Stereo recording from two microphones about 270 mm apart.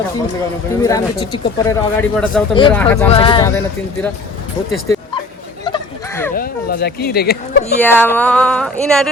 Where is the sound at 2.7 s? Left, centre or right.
Centre.